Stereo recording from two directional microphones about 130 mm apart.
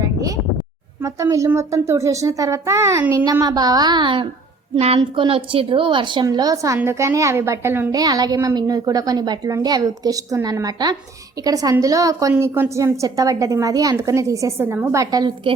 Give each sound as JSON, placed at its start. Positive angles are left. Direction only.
{"t": 0.0, "sound": "a sound", "side_deg": -25}
{"t": 1.0, "sound": "a woman's voice", "side_deg": -25}
{"t": 3.4, "sound": "a woman's voice", "side_deg": -30}
{"t": 6.2, "sound": "a woman's voice", "side_deg": -30}
{"t": 7.9, "sound": "a woman's voice", "side_deg": -30}